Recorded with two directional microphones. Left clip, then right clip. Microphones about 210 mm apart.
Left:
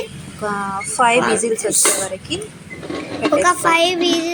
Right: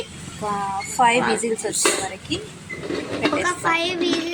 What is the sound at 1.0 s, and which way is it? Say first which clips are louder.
Speech: left 3 dB; 5° left (ahead or behind).